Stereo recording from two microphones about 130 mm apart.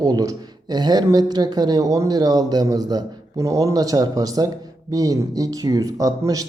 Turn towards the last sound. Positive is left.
turn(degrees=-25)  # may be behind; listen again after turning